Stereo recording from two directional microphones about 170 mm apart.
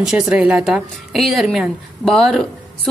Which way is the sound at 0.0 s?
5° right (ahead or behind).